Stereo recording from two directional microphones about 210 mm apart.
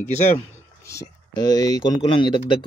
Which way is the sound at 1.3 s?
20° left (ahead or behind).